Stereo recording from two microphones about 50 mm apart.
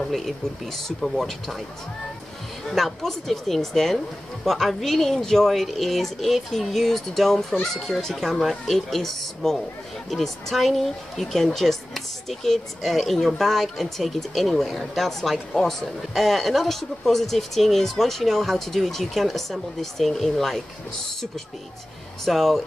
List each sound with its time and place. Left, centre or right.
0.7 s speech: centre
2.7 s speech: centre
22.2 s speech: centre